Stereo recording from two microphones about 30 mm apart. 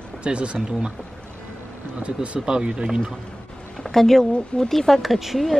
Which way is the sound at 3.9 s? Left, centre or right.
Centre.